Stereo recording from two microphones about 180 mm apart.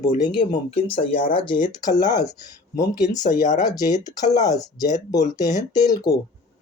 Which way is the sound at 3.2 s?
45° left (ahead or behind).